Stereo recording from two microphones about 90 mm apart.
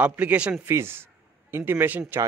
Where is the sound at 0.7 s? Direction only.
25° right (ahead or behind).